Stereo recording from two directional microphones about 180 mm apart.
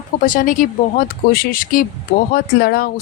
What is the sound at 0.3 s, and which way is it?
Speech, 50° left (ahead or behind).